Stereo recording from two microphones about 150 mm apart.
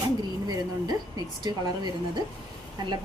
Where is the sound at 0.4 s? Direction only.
25° right (ahead or behind).